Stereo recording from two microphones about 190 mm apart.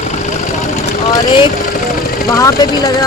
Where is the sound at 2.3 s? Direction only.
20° left (ahead or behind).